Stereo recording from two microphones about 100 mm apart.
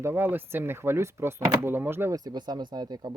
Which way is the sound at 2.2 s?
45° right (ahead or behind).